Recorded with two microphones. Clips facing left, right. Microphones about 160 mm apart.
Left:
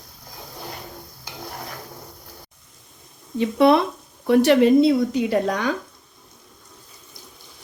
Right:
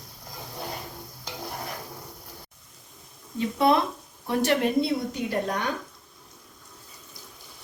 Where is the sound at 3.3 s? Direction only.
75° left (ahead or behind); by 5.6 s 90° left.